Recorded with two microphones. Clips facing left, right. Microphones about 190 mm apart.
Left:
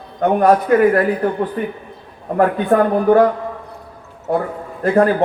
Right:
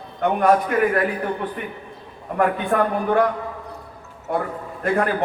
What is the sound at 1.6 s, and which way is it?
A man's voice, 35° left (ahead or behind).